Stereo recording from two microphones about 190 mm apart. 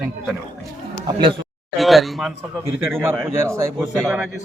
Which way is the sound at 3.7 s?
Centre (ahead or behind).